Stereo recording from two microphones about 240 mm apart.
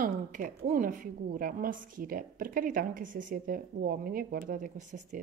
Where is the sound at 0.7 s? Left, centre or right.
Right.